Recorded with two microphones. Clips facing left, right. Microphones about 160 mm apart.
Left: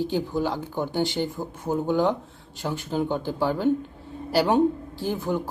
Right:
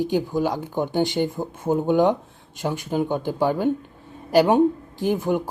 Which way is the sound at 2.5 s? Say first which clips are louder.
Right 3 dB; 15° right (ahead or behind).